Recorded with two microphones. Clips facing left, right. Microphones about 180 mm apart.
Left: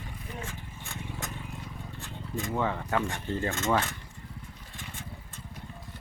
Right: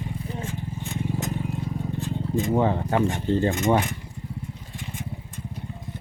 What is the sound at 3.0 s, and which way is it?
Speech, 20° right (ahead or behind).